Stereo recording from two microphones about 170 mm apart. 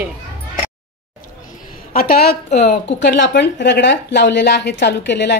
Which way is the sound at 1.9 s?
65° left (ahead or behind).